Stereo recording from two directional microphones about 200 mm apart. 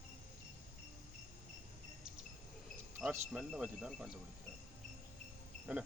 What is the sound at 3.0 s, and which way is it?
Speech, 5° right (ahead or behind).